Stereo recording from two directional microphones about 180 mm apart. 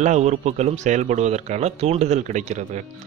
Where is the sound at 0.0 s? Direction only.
40° right (ahead or behind).